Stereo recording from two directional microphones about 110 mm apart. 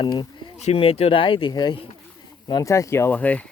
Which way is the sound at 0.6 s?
75° left (ahead or behind).